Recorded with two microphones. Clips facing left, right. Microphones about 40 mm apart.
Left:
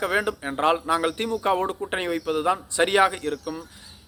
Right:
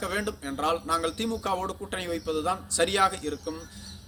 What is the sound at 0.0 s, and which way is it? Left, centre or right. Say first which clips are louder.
Speech: left 6 dB; left.